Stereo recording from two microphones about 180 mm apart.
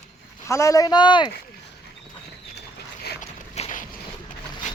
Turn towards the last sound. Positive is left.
turn(degrees=40)  # may be behind; listen again after turning